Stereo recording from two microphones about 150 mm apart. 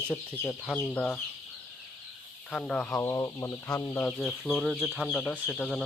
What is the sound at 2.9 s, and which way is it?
Speech, 20° left (ahead or behind).